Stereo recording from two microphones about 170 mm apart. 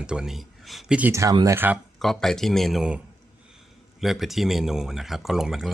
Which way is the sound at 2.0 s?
Centre (ahead or behind).